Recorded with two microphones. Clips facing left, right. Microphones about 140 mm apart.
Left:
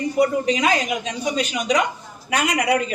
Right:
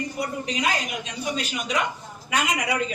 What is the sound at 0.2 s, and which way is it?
A woman's voice, 90° left.